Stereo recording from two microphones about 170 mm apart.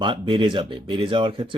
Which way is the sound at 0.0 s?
30° right (ahead or behind).